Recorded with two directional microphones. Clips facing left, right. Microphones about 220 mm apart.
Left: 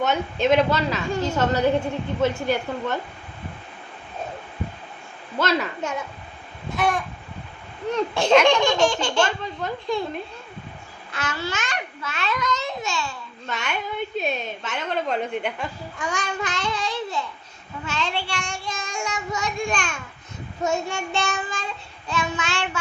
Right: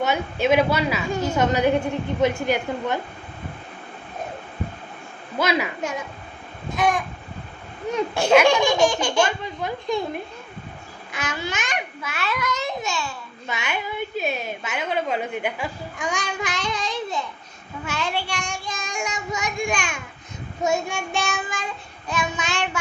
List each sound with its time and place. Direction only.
0.0 s a woman's voice: 10° right (ahead or behind)
5.4 s a woman's voice: 10° right (ahead or behind)
11.1 s a woman's voice: 15° right (ahead or behind)